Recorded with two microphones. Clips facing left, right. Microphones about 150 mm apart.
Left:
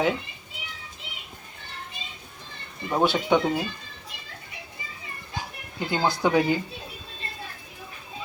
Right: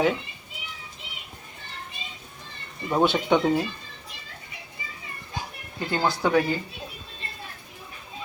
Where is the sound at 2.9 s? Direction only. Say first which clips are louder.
Right 1 dB; 5° left (ahead or behind).